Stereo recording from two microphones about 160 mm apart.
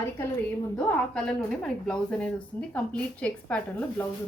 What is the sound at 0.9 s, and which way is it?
A woman's voice, 5° left (ahead or behind).